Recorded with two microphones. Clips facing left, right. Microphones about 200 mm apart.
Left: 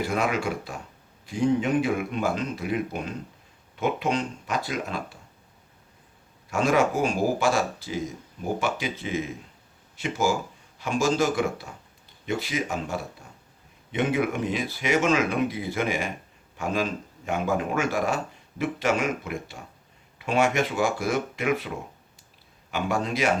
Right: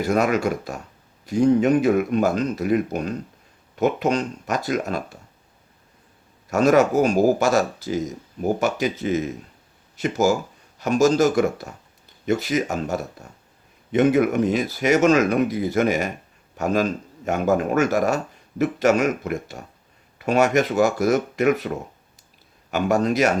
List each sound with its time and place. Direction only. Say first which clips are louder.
0.0 s speech: right 6 dB; 40° right (ahead or behind)
6.5 s speech: right 6 dB; 40° right (ahead or behind)
22.7 s speech: right 7 dB; 40° right (ahead or behind)